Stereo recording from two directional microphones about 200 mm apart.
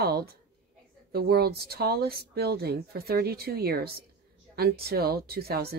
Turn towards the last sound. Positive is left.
turn(degrees=-50)  # may be behind; listen again after turning